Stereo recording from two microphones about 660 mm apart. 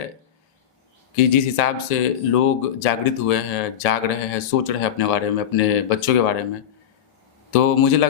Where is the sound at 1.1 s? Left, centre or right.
Left.